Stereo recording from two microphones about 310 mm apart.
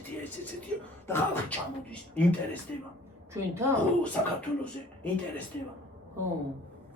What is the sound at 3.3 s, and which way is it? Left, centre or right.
Speech, centre.